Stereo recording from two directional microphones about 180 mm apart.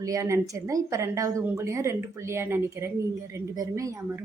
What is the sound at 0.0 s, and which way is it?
A woman's voice, 20° right (ahead or behind).